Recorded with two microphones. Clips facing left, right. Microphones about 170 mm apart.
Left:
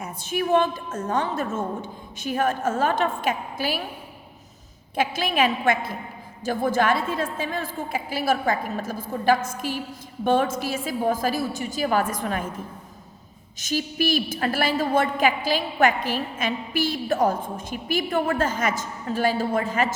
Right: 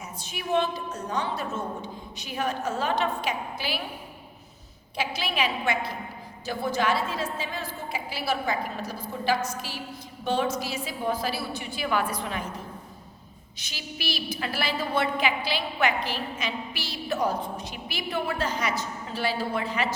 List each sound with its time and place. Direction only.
0.0 s a woman's voice: 50° left (ahead or behind)
4.9 s a woman's voice: 50° left (ahead or behind)
13.6 s a woman's voice: 45° left (ahead or behind)